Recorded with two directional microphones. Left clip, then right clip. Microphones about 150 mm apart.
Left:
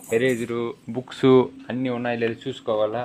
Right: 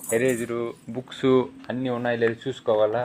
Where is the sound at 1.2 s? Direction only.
45° left (ahead or behind).